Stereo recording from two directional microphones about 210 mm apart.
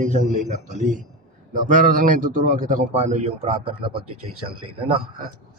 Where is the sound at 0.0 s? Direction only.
35° right (ahead or behind).